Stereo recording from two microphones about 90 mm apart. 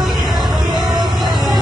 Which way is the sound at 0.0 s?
Centre (ahead or behind).